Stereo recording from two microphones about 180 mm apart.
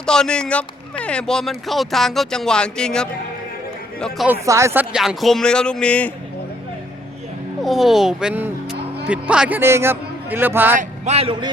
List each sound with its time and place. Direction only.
0.0 s speech: 5° left (ahead or behind)
4.3 s speech: 15° right (ahead or behind); by 6.1 s 10° left (ahead or behind)
7.6 s a man's voice: centre (ahead or behind)
10.8 s speech: 40° right (ahead or behind)